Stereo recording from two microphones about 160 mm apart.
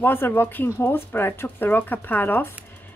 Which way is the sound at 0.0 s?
15° left (ahead or behind).